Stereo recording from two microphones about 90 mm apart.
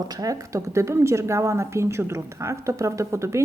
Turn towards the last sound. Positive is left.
turn(degrees=-35)  # may be behind; listen again after turning